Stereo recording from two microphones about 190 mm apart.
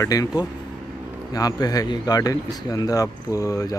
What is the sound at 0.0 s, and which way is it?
Speech, 20° left (ahead or behind).